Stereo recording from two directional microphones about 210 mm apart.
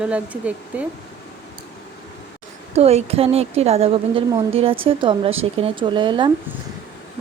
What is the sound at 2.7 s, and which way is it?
A woman's voice, 30° right (ahead or behind).